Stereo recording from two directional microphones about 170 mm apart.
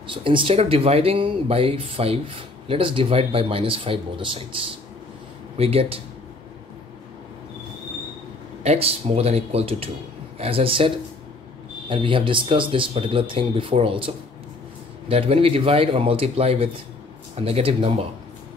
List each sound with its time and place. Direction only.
0.0 s speech: 30° right (ahead or behind)
8.6 s speech: 35° right (ahead or behind)
11.9 s speech: 30° right (ahead or behind)